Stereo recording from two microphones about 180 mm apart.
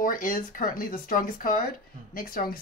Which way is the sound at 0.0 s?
50° left (ahead or behind).